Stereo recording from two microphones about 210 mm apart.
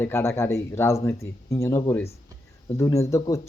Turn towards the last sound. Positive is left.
turn(degrees=15)  # may be behind; listen again after turning